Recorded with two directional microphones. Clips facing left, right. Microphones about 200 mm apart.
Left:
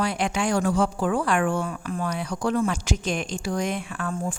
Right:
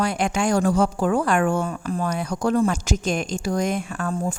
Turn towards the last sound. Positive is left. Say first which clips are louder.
# right 3 dB
turn(degrees=-40)  # may be behind; listen again after turning